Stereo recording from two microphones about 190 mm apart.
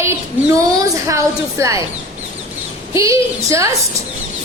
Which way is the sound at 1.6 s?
15° right (ahead or behind).